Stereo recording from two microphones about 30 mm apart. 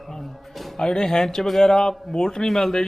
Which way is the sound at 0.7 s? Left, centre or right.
Left.